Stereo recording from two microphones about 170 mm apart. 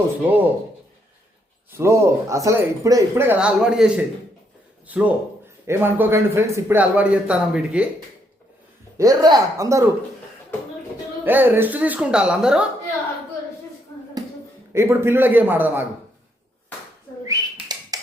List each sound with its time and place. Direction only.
0.2 s speech: 10° right (ahead or behind)
1.7 s speech: 15° right (ahead or behind)
9.0 s speech: 20° right (ahead or behind)
11.3 s speech: 10° right (ahead or behind)
14.7 s speech: 15° right (ahead or behind)
17.2 s bird: 20° right (ahead or behind)